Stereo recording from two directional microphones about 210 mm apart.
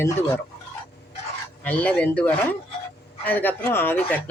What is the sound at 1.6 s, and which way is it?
Speech, 5° left (ahead or behind).